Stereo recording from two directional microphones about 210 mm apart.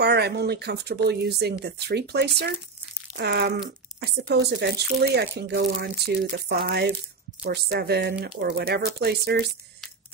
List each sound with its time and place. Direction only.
0.0 s speech: 50° right (ahead or behind)